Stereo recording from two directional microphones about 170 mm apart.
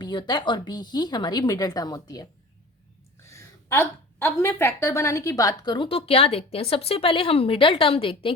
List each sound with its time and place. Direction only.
0.0 s speech: 25° left (ahead or behind)
3.2 s a woman's voice: 15° left (ahead or behind)